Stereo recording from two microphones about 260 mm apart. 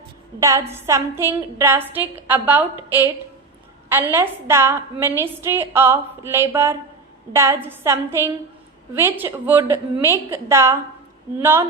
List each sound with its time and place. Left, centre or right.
0.3 s a woman's voice: centre
4.1 s a woman's voice: centre